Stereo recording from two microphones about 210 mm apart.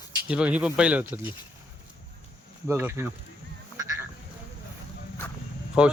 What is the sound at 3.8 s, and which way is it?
Quack, 15° right (ahead or behind).